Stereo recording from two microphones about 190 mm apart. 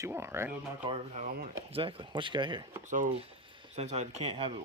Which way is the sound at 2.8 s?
45° right (ahead or behind).